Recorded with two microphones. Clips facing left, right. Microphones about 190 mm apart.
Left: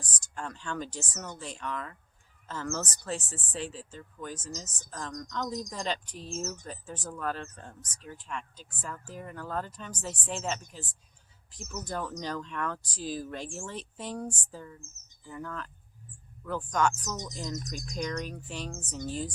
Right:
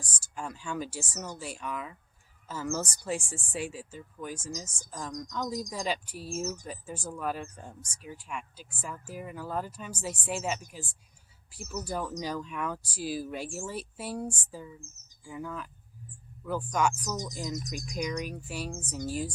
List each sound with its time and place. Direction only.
0.0 s speech: 10° right (ahead or behind)